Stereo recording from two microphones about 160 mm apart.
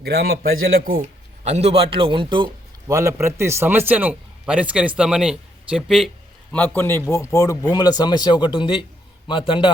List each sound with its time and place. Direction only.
0.0 s a man's voice: 80° right
1.5 s a man's voice: 40° right (ahead or behind); by 6.1 s 5° right (ahead or behind)
6.5 s a man's voice: 10° left (ahead or behind); by 8.8 s 30° left (ahead or behind)